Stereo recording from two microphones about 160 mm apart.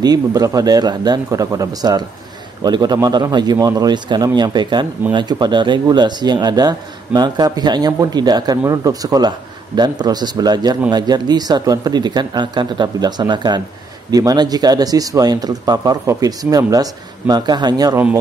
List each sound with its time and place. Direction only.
0.0 s speech: 25° right (ahead or behind)